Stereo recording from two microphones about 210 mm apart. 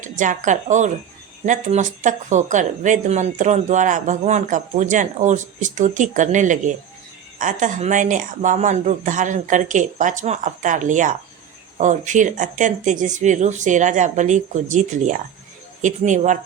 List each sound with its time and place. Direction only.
0.0 s speech: 35° right (ahead or behind)